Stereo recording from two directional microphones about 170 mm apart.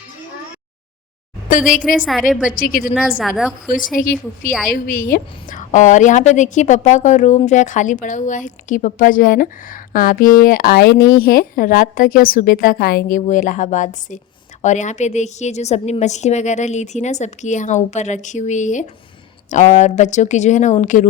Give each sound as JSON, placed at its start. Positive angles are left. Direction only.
{"t": 1.5, "sound": "a woman's voice", "side_deg": 50}
{"t": 2.0, "sound": "a woman's voice", "side_deg": 0}
{"t": 2.6, "sound": "a woman's voice", "side_deg": 55}
{"t": 3.2, "sound": "a woman's voice", "side_deg": 0}
{"t": 4.0, "sound": "a woman's voice", "side_deg": 55}